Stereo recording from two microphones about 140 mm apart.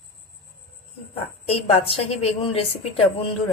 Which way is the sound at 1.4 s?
45° left (ahead or behind).